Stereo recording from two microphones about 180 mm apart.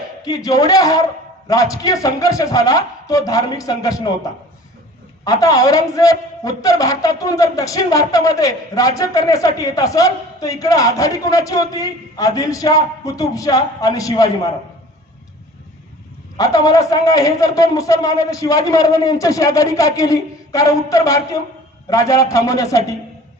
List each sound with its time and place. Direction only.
0.3 s a man's voice: 20° left (ahead or behind)
16.4 s a man's voice: 20° left (ahead or behind)